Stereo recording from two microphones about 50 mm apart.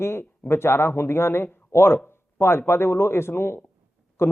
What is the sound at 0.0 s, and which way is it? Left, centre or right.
Speech, left.